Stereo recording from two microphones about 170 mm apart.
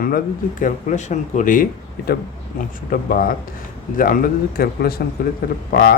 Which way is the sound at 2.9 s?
60° left (ahead or behind).